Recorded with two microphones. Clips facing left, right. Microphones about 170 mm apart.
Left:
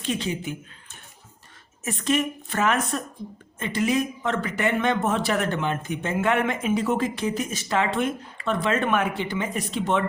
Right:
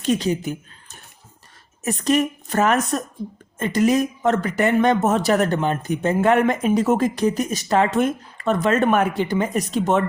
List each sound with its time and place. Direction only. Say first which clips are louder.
0.0 s a woman's voice: right 7 dB; 40° right (ahead or behind)